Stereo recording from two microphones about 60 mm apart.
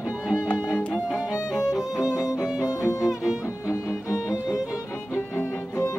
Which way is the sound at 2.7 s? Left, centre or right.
Left.